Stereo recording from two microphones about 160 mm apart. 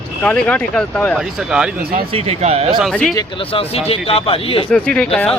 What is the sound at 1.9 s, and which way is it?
Speech, 40° right (ahead or behind).